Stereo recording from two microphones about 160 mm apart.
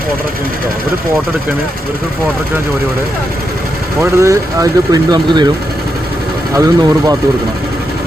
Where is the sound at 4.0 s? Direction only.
20° right (ahead or behind).